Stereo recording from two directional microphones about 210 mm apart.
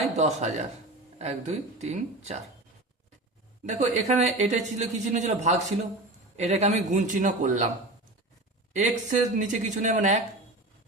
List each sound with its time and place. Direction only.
0.0 s a man's voice: 35° right (ahead or behind)
3.7 s a man's voice: 30° right (ahead or behind)
8.7 s a man's voice: 35° right (ahead or behind)